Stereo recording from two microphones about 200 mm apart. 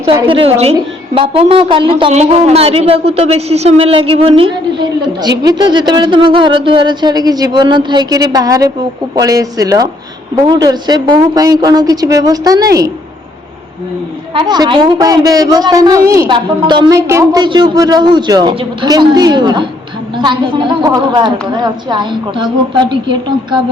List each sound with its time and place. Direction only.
0.1 s a man's voice: 25° right (ahead or behind)
14.3 s a man's voice: 20° right (ahead or behind)